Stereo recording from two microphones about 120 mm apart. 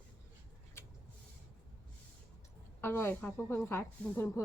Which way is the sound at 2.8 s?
20° left (ahead or behind).